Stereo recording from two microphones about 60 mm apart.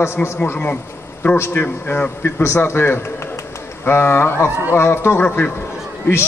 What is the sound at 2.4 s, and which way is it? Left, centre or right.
A man's voice, left.